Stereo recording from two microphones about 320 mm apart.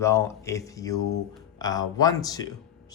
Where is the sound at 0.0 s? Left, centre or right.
Centre.